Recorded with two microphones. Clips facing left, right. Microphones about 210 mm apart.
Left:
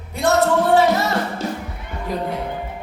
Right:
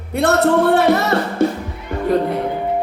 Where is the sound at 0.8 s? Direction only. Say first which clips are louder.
Right 2 dB; 60° right (ahead or behind).